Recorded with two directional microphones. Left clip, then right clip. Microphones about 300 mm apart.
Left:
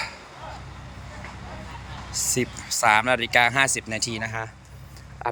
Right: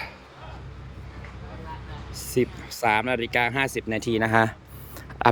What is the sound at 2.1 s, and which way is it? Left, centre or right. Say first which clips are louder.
Speech: right 1 dB; centre.